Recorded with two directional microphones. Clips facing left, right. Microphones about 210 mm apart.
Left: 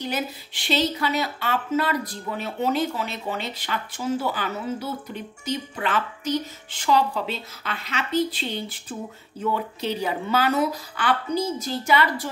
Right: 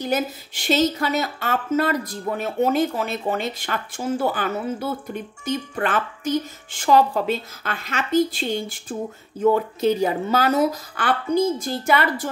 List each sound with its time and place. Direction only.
0.0 s speech: 45° right (ahead or behind)